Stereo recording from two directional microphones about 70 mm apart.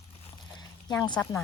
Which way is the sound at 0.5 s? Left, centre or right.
Left.